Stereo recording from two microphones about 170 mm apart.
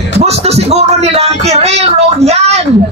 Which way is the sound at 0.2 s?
40° right (ahead or behind).